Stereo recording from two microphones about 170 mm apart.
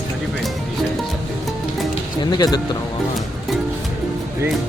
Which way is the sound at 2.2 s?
25° left (ahead or behind).